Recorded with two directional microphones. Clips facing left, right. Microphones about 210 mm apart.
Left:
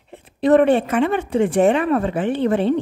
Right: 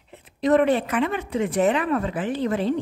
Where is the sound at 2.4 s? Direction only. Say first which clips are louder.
Left 5 dB; 60° left (ahead or behind).